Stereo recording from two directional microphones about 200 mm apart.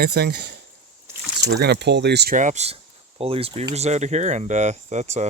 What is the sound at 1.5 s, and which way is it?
Speech, 55° right (ahead or behind).